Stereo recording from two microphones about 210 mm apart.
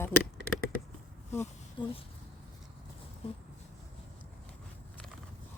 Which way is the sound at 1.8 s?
20° left (ahead or behind).